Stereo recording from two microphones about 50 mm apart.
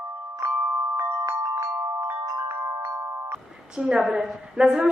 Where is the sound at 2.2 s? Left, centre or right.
Right.